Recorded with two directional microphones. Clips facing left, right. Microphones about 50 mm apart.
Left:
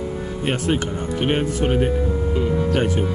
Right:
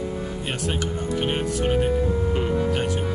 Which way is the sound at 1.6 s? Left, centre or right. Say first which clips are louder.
Left 1 dB; centre.